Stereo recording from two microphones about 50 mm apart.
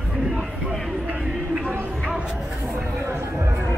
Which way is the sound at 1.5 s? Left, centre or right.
Right.